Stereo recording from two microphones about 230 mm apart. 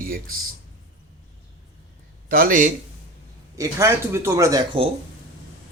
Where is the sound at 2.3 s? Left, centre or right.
Right.